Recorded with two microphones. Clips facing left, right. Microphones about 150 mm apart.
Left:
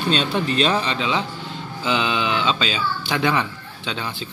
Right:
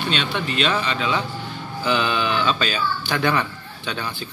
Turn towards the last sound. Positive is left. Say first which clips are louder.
# even
turn(degrees=20)  # may be behind; listen again after turning